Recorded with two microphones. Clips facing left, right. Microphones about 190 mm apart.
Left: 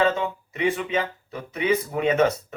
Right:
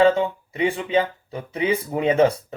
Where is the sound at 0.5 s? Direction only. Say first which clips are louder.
Right 3 dB; 30° right (ahead or behind).